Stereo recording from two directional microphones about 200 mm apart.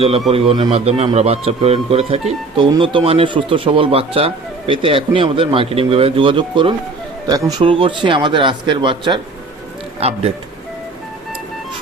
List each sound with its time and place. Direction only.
0.3 s speech: 30° right (ahead or behind)